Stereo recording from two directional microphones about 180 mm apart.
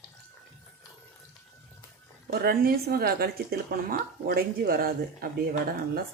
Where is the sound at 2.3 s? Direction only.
55° right (ahead or behind).